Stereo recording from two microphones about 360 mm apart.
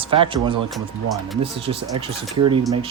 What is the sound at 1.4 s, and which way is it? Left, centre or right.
Speech, centre.